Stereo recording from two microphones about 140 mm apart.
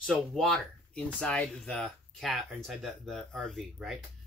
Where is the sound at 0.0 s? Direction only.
5° left (ahead or behind).